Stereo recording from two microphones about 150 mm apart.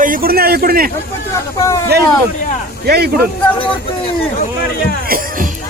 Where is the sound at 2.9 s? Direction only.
90° right.